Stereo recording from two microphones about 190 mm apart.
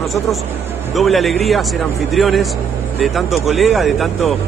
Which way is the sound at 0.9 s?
Centre (ahead or behind).